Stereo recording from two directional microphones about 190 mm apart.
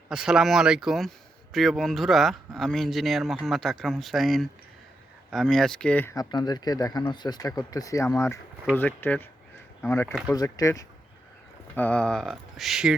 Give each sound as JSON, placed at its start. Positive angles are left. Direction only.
{"t": 0.1, "sound": "speech", "side_deg": -5}